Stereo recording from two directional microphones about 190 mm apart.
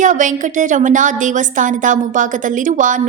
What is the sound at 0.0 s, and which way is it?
A woman's voice, 40° right (ahead or behind).